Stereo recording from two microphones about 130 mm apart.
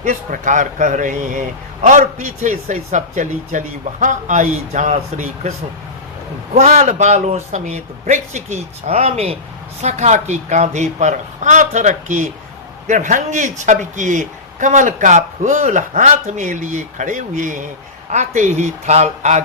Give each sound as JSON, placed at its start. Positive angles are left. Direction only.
{"t": 0.0, "sound": "a man's voice", "side_deg": -70}
{"t": 9.8, "sound": "a man's voice", "side_deg": -60}
{"t": 18.1, "sound": "speech", "side_deg": -65}